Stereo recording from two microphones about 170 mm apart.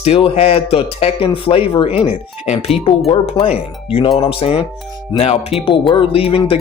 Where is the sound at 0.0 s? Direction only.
35° left (ahead or behind).